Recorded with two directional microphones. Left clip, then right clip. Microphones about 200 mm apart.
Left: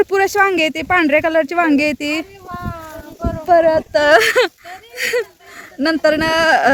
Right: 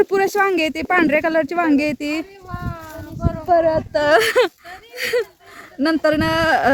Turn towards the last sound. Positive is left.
turn(degrees=-5)  # may be behind; listen again after turning